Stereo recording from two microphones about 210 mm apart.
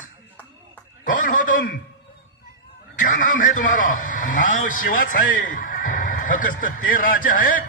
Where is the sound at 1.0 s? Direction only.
40° left (ahead or behind).